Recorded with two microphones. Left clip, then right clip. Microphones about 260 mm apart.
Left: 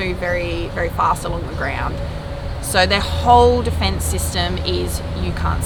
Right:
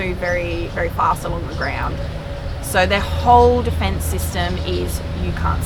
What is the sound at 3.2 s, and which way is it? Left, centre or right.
Speech, left.